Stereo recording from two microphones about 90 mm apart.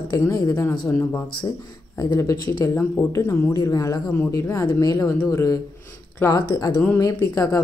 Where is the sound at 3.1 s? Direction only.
30° left (ahead or behind).